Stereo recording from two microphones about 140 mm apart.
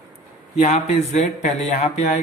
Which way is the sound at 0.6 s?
50° left (ahead or behind).